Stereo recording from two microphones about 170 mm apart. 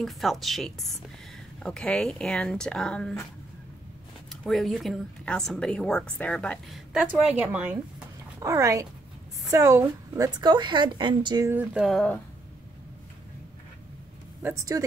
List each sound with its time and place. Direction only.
0.0 s speech: centre (ahead or behind)
4.3 s speech: centre (ahead or behind)
8.4 s a woman's voice: 20° right (ahead or behind)
11.5 s speech: 5° right (ahead or behind)
14.4 s a woman's voice: 20° right (ahead or behind)